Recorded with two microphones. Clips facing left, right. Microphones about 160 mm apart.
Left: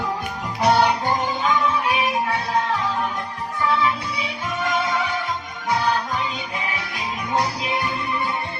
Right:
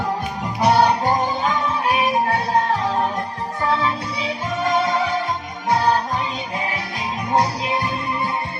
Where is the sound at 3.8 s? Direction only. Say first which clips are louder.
Even; 25° right (ahead or behind).